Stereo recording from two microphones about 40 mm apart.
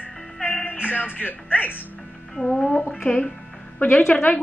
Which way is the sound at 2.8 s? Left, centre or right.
Left.